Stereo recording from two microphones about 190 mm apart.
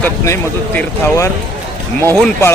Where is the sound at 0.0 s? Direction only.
10° left (ahead or behind).